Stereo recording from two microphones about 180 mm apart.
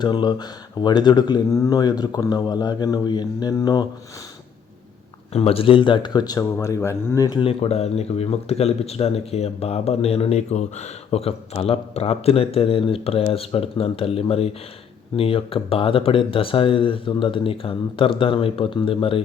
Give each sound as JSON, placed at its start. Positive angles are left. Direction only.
{"t": 0.0, "sound": "speech", "side_deg": 25}
{"t": 5.3, "sound": "speech", "side_deg": 35}